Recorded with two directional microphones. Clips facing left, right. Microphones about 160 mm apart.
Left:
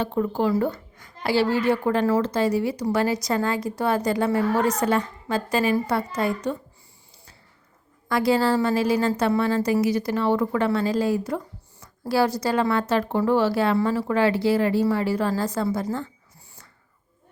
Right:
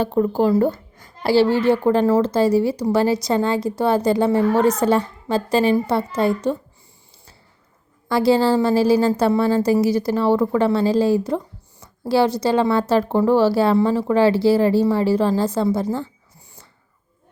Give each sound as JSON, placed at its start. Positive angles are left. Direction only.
{"t": 0.0, "sound": "speech", "side_deg": -35}
{"t": 8.0, "sound": "a woman's voice", "side_deg": -30}